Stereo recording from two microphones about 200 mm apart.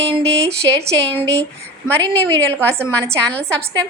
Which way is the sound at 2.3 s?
10° left (ahead or behind).